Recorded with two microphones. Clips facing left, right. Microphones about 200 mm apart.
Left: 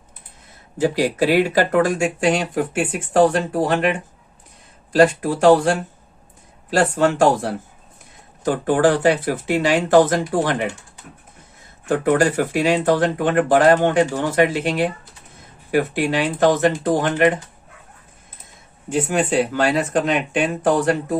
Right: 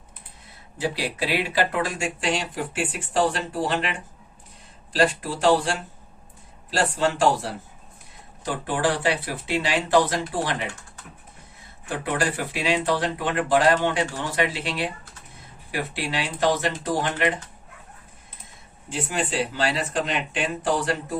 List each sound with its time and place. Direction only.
0.8 s speech: 45° left (ahead or behind)
11.9 s speech: 45° left (ahead or behind)
18.9 s speech: 50° left (ahead or behind)